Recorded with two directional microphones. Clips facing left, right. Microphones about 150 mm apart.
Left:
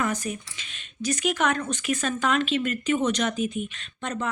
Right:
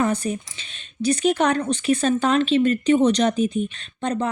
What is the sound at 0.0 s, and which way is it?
Speech, 30° right (ahead or behind).